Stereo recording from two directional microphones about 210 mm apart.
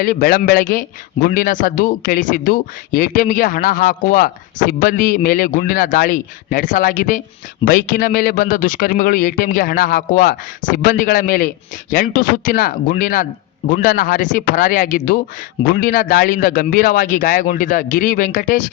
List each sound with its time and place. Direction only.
0.0 s a man's voice: 45° left (ahead or behind)